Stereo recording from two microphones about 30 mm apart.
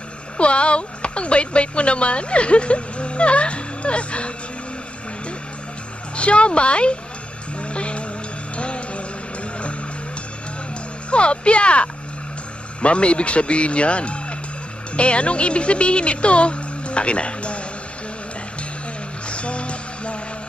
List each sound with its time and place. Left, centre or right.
0.4 s speech: left
6.1 s speech: left
7.5 s vehicle: left
8.5 s music: left
11.1 s speech: left
19.2 s music: left